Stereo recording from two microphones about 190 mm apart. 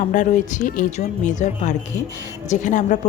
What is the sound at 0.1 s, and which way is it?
A woman's voice, 40° left (ahead or behind).